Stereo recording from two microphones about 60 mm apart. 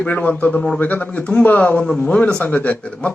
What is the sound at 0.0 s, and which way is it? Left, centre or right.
A man's voice, left.